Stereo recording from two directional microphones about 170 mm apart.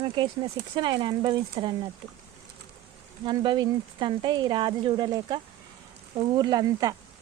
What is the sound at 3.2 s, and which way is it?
Speech, 25° right (ahead or behind).